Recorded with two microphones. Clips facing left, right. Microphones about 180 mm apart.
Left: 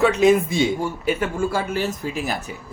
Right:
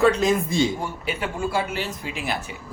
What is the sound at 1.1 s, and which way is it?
Speech, 45° left (ahead or behind).